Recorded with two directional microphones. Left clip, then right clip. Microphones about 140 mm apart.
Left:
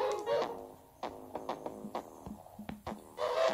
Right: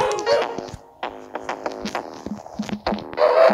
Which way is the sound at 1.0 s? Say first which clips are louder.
Right 11 dB; 20° right (ahead or behind).